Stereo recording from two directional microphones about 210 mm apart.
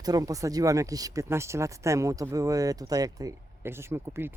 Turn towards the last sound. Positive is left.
turn(degrees=-10)  # may be behind; listen again after turning